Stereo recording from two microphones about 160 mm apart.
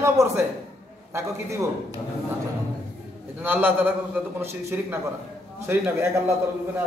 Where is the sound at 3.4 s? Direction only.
10° right (ahead or behind).